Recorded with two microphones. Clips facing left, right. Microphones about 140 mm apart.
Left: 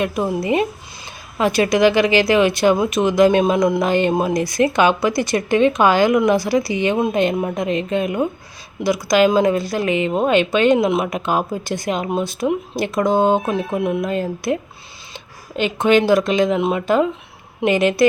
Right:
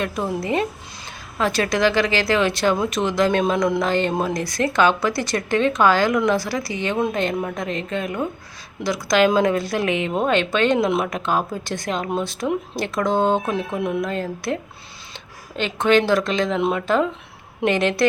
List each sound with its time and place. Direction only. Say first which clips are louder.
0.0 s speech: left 4 dB; 15° left (ahead or behind)